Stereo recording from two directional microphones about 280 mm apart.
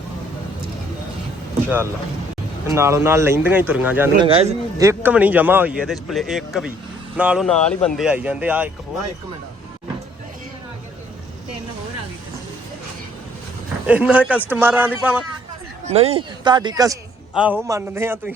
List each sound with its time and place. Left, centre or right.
2.6 s speech: centre
4.3 s speech: centre
4.9 s speech: centre
13.8 s speech: centre
15.9 s speech: right